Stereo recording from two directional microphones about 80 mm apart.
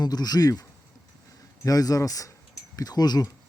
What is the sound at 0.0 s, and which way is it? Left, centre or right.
Speech, left.